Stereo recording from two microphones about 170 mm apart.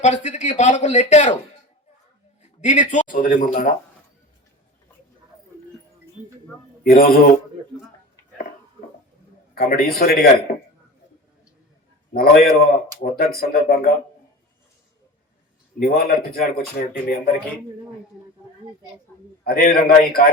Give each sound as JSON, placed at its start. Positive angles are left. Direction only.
{"t": 0.0, "sound": "a man's voice", "side_deg": 45}
{"t": 2.4, "sound": "a man's voice", "side_deg": 45}
{"t": 6.8, "sound": "speech", "side_deg": 60}
{"t": 9.6, "sound": "speech", "side_deg": 60}
{"t": 12.1, "sound": "speech", "side_deg": 60}
{"t": 15.8, "sound": "speech", "side_deg": 65}
{"t": 19.5, "sound": "speech", "side_deg": 60}